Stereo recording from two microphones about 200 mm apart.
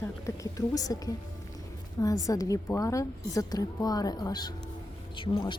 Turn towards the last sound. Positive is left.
turn(degrees=25)  # may be behind; listen again after turning